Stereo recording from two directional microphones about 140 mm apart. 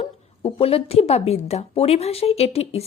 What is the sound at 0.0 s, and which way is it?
A woman's voice, 45° left (ahead or behind).